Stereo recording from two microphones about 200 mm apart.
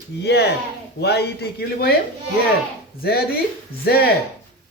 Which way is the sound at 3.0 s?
50° left (ahead or behind).